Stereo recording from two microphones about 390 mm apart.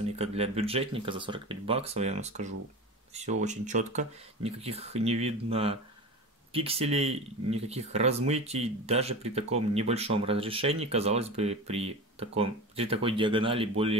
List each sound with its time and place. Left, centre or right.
0.0 s speech: centre